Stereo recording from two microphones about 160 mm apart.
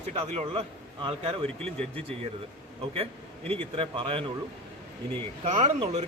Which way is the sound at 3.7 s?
35° right (ahead or behind).